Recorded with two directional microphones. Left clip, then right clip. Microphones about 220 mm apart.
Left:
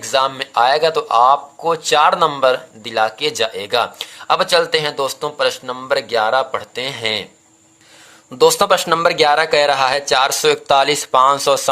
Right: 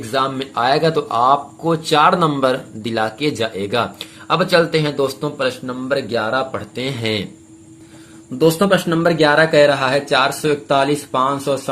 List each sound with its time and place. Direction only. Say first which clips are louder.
0.1 s speech: left 3 dB; 30° left (ahead or behind)
8.4 s speech: left 2 dB; 45° left (ahead or behind)